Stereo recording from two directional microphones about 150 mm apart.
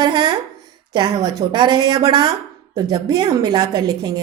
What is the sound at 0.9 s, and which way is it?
A woman's voice, 30° right (ahead or behind).